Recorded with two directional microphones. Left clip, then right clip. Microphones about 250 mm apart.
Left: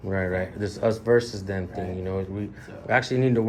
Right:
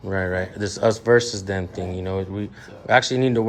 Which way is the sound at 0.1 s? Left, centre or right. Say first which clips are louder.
Right 3 dB; centre.